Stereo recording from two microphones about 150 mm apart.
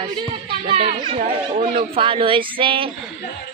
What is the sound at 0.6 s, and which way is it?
A man's voice, 40° right (ahead or behind).